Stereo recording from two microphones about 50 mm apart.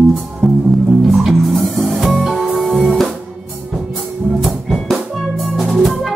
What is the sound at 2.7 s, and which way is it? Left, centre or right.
Music, right.